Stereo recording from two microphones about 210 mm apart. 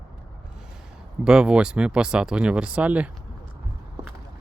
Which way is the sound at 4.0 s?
20° right (ahead or behind).